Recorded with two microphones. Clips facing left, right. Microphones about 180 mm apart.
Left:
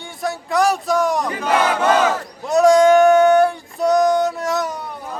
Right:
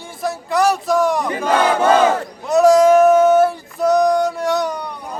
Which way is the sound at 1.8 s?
30° right (ahead or behind).